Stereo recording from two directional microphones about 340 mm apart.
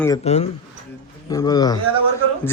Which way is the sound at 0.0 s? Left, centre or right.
Centre.